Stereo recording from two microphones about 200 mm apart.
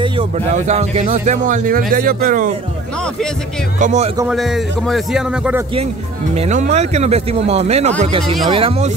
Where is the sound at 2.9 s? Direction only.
5° left (ahead or behind).